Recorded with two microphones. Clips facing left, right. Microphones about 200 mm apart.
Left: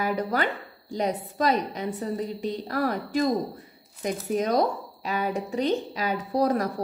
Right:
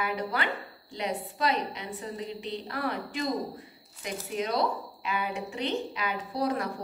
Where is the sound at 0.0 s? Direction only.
45° left (ahead or behind).